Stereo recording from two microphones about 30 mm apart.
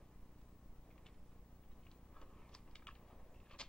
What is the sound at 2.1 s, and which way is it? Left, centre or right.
Typing, left.